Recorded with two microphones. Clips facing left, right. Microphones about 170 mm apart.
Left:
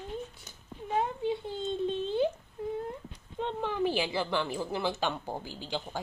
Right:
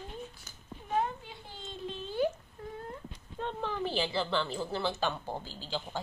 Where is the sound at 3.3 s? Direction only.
15° left (ahead or behind).